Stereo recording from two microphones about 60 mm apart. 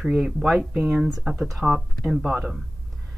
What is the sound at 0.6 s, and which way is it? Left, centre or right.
Speech, centre.